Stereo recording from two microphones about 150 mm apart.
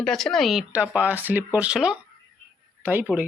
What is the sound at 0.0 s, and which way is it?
A child's voice, 5° left (ahead or behind).